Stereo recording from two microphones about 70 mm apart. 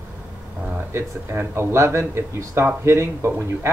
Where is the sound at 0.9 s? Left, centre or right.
Right.